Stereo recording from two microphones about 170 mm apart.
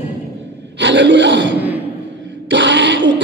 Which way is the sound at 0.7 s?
90° right.